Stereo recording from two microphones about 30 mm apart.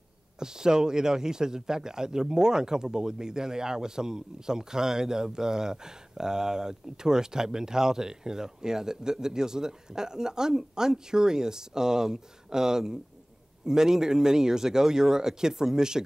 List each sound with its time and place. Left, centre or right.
0.4 s a man's voice: right